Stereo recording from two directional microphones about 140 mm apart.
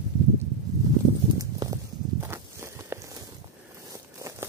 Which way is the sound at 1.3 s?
25° right (ahead or behind).